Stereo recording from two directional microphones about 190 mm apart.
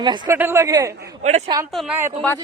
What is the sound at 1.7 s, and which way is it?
Speech, centre (ahead or behind).